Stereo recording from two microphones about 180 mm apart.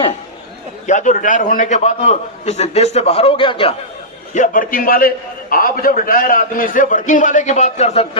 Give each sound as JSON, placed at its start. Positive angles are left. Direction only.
{"t": 0.9, "sound": "a man's voice", "side_deg": 45}
{"t": 4.4, "sound": "a man's voice", "side_deg": 50}